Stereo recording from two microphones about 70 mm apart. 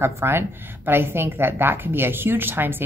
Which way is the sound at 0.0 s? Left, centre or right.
Right.